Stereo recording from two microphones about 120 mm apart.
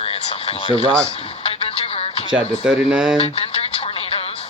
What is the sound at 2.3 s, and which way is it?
Speech, 10° right (ahead or behind).